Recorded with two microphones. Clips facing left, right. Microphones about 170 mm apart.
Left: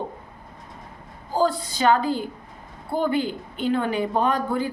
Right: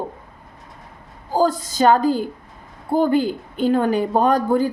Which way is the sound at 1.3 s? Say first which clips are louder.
Right 4 dB; 45° right (ahead or behind).